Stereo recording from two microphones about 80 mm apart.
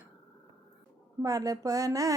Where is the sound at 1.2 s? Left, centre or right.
Right.